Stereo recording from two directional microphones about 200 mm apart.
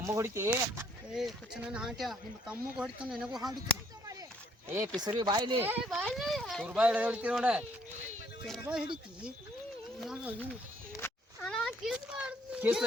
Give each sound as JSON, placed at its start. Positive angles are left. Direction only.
{"t": 0.0, "sound": "speech", "side_deg": -15}
{"t": 3.3, "sound": "speech", "side_deg": -20}
{"t": 4.9, "sound": "speech", "side_deg": -20}
{"t": 5.6, "sound": "speech", "side_deg": -5}
{"t": 10.0, "sound": "speech", "side_deg": -5}
{"t": 11.0, "sound": "children playing", "side_deg": 5}